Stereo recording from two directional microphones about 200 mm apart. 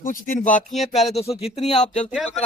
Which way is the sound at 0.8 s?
Centre (ahead or behind).